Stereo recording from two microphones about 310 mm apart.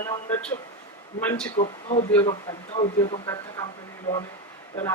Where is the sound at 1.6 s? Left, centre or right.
Left.